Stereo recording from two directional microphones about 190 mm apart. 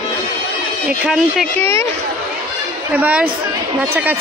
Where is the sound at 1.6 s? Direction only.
15° left (ahead or behind).